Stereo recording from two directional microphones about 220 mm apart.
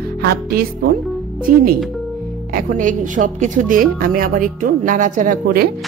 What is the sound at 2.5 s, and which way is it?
Speech, 40° right (ahead or behind).